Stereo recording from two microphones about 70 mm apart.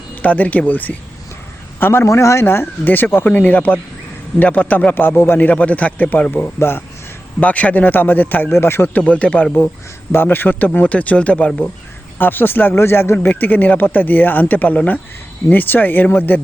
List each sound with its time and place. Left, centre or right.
0.2 s speech: left
1.8 s speech: left
9.0 s speech: centre